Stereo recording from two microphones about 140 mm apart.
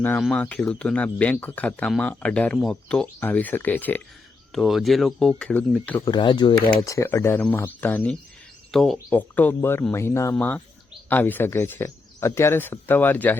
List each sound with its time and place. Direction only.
0.2 s a man's voice: 5° left (ahead or behind)
4.5 s a man's voice: centre (ahead or behind)
6.1 s speech: 30° left (ahead or behind)
6.8 s a man's voice: 20° left (ahead or behind)
8.7 s a man's voice: centre (ahead or behind)